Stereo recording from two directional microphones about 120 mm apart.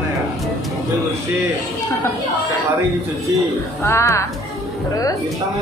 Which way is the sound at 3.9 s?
25° left (ahead or behind).